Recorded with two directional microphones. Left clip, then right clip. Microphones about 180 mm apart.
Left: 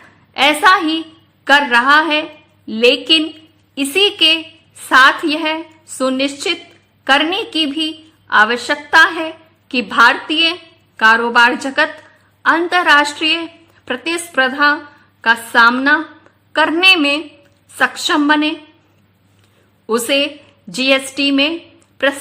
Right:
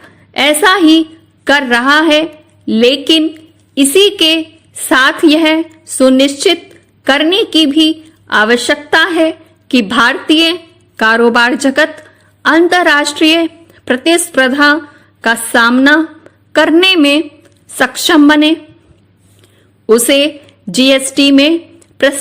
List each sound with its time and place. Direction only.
0.3 s a woman's voice: 35° right (ahead or behind)
19.9 s a woman's voice: 40° right (ahead or behind)